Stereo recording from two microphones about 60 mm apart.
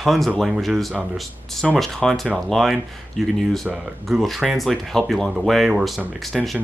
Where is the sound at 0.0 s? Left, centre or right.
Centre.